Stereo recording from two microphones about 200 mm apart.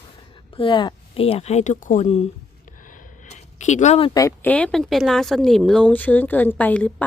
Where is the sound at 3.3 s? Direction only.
35° left (ahead or behind).